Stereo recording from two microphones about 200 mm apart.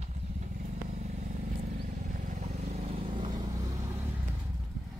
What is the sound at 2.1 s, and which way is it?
Vehicle, 35° right (ahead or behind).